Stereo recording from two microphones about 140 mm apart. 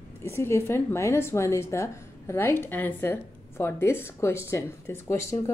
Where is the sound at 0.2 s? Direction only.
20° left (ahead or behind).